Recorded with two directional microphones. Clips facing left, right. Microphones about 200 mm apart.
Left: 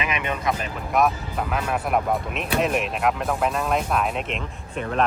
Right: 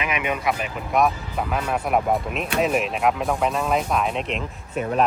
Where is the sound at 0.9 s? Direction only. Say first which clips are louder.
Right 1 dB; centre (ahead or behind).